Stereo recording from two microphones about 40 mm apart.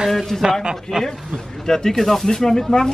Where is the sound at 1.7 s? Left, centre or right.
Centre.